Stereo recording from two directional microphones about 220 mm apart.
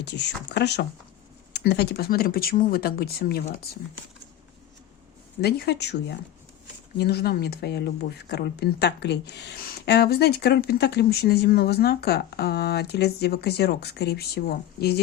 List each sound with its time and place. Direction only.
0.0 s speech: 50° left (ahead or behind)
5.4 s speech: 45° left (ahead or behind)